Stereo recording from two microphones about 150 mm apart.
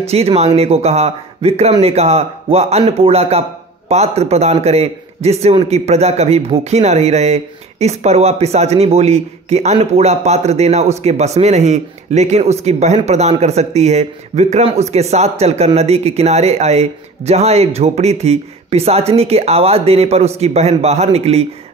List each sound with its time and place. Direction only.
0.1 s a man's voice: 45° right (ahead or behind)